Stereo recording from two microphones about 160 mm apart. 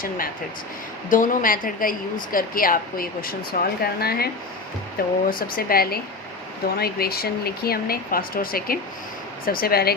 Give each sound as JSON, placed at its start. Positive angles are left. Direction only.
{"t": 1.1, "sound": "a woman's voice", "side_deg": 55}